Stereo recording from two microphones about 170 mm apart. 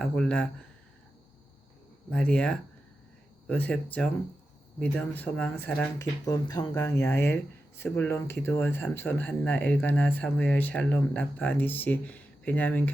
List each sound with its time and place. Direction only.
0.0 s speech: 5° left (ahead or behind)
2.0 s speech: 5° left (ahead or behind)
6.2 s speech: 20° left (ahead or behind)